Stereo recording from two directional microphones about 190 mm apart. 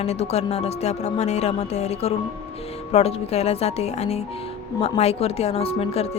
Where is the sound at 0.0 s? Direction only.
35° left (ahead or behind).